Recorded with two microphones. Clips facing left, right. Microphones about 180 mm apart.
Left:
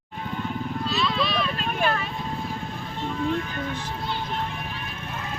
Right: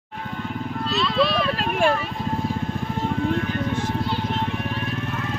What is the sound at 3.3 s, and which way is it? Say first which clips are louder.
Music: right 5 dB; 50° right (ahead or behind).